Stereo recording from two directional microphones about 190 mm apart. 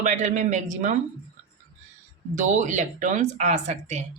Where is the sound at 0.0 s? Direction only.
40° right (ahead or behind).